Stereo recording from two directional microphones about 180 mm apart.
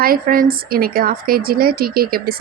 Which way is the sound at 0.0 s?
55° right (ahead or behind).